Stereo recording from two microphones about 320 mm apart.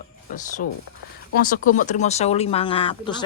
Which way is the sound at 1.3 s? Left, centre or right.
Left.